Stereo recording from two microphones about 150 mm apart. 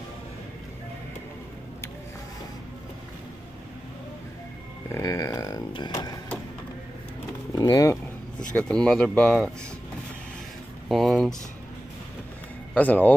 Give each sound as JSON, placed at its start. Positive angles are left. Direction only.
{"t": 4.9, "sound": "a sound", "side_deg": 20}
{"t": 5.7, "sound": "music", "side_deg": 30}
{"t": 7.5, "sound": "bird", "side_deg": 20}
{"t": 8.5, "sound": "speech", "side_deg": 5}
{"t": 10.9, "sound": "a sound", "side_deg": 0}
{"t": 12.7, "sound": "speech", "side_deg": 10}